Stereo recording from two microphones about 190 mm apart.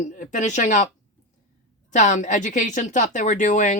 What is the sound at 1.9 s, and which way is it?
Speech, 40° left (ahead or behind).